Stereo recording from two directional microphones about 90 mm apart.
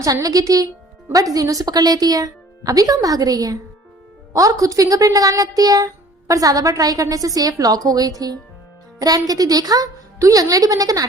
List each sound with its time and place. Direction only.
0.0 s a woman's voice: 40° right (ahead or behind)